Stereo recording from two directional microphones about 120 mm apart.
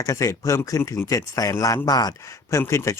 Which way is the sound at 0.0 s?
25° left (ahead or behind).